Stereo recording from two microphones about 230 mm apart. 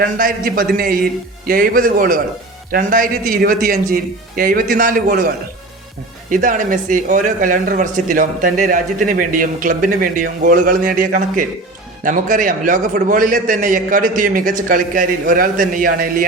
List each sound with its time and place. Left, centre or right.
0.0 s speech: right
6.3 s speech: right